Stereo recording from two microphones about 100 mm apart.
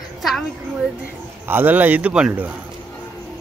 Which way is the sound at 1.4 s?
20° right (ahead or behind).